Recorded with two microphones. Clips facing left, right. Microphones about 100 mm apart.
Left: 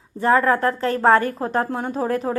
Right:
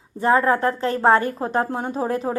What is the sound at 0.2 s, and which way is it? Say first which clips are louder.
A woman's voice: even; 25° right (ahead or behind).